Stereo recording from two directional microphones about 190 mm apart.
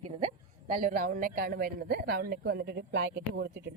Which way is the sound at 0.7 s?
45° right (ahead or behind).